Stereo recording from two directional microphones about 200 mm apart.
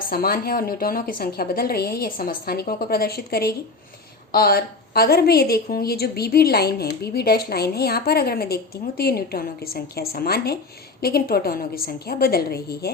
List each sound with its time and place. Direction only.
0.1 s a woman's voice: 50° left (ahead or behind)